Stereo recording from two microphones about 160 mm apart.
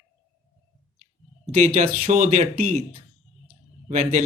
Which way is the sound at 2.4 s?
40° right (ahead or behind).